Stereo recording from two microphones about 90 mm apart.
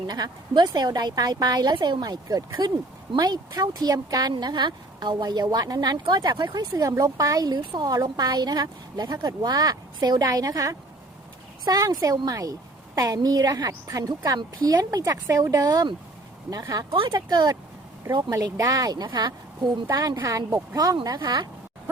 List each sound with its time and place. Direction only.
0.1 s a woman's voice: 50° right (ahead or behind)
19.9 s a woman's voice: 45° right (ahead or behind)
20.1 s a woman's voice: 30° right (ahead or behind); by 21.4 s 50° right (ahead or behind)